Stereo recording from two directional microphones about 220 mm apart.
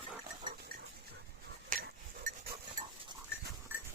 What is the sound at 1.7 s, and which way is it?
Goat, 45° right (ahead or behind).